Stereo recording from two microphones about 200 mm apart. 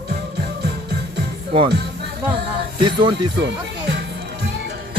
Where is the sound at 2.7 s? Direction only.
25° right (ahead or behind).